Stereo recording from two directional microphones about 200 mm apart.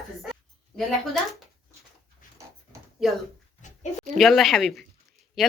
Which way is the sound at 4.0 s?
Centre (ahead or behind).